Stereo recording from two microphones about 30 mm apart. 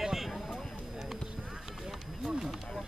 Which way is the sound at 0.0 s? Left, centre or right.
Centre.